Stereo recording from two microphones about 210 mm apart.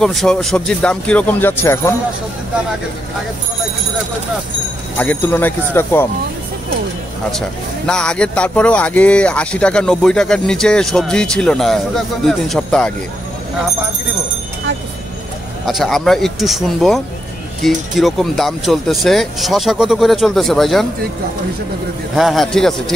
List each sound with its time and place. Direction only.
0.0 s speech: centre (ahead or behind)
4.9 s speech: 5° left (ahead or behind)
7.3 s speech: 5° left (ahead or behind)
15.6 s speech: centre (ahead or behind)
22.1 s speech: centre (ahead or behind)